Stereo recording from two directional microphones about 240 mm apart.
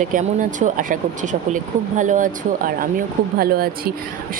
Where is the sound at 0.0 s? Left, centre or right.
Right.